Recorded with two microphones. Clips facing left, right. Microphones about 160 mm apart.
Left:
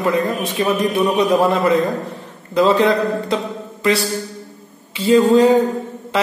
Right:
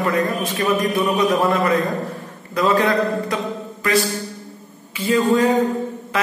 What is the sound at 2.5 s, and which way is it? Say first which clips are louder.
Speech: left 3 dB; 25° left (ahead or behind).